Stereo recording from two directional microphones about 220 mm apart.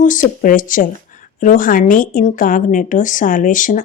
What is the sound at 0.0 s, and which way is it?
A woman's voice, 35° left (ahead or behind).